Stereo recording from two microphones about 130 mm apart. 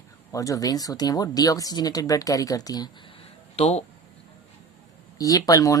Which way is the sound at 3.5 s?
55° left (ahead or behind).